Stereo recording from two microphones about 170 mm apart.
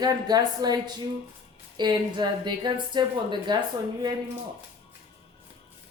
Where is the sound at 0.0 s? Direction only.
25° right (ahead or behind).